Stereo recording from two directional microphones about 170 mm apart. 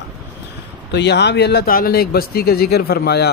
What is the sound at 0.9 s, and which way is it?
Speech, 90° left.